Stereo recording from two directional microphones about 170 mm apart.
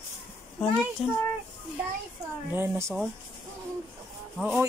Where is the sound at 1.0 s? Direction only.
Centre (ahead or behind).